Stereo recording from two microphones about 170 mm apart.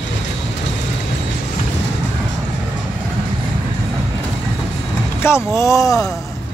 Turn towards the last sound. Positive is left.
turn(degrees=20)  # may be behind; listen again after turning